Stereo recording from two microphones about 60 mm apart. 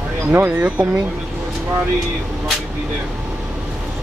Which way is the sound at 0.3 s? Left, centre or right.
Right.